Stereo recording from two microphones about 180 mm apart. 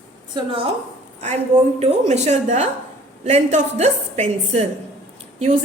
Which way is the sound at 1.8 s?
40° right (ahead or behind).